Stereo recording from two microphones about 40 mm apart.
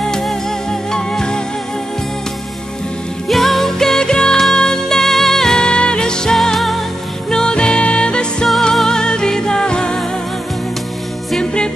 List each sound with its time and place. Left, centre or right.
0.0 s music: centre
3.3 s music: centre
6.3 s music: centre